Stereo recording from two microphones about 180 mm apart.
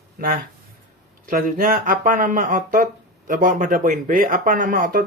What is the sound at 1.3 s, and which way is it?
Speech, 50° right (ahead or behind).